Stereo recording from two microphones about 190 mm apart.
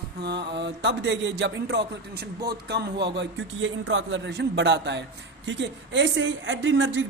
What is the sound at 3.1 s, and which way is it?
Speech, 80° right.